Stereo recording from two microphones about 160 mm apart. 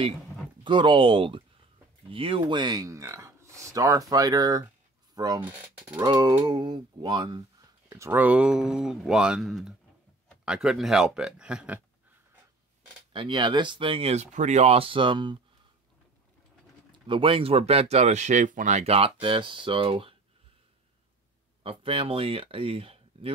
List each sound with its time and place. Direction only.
0.7 s speech: 30° right (ahead or behind)
5.4 s speech: 10° right (ahead or behind)
6.0 s speech: 25° right (ahead or behind)
7.9 s speech: 15° right (ahead or behind)
13.1 s speech: 30° right (ahead or behind)
17.1 s speech: 35° right (ahead or behind)
21.6 s speech: 35° right (ahead or behind)